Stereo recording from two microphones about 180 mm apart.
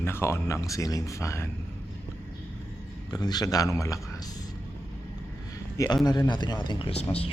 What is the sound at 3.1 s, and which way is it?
Speech, 20° left (ahead or behind).